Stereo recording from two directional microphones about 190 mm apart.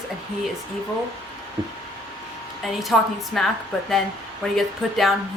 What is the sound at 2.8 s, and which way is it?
A woman's voice, centre (ahead or behind).